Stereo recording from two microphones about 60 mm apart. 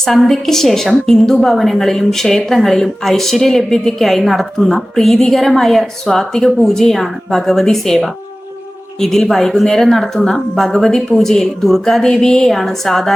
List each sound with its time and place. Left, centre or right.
0.0 s a woman's voice: centre